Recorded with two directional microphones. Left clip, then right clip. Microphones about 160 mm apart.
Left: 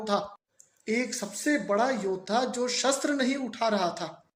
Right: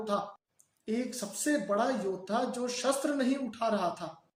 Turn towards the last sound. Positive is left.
turn(degrees=15)  # may be behind; listen again after turning